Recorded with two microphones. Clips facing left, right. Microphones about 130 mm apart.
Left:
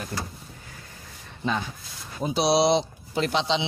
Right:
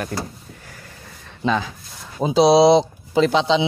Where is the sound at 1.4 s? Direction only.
90° right.